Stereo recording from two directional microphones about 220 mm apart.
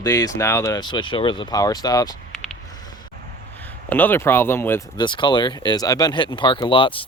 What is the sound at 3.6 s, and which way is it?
Speech, 10° left (ahead or behind).